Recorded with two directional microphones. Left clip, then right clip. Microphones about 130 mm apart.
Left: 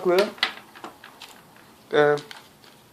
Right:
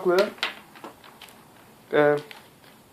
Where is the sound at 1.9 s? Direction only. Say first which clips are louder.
Left 1 dB; 30° right (ahead or behind).